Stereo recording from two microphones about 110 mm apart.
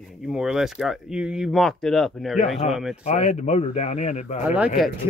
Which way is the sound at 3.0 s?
70° left (ahead or behind).